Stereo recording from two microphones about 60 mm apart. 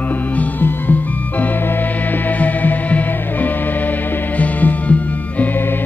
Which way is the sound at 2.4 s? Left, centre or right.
Left.